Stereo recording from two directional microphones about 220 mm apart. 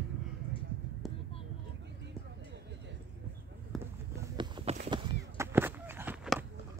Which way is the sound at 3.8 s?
15° right (ahead or behind).